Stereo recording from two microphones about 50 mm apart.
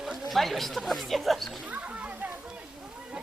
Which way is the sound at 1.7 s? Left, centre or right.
Right.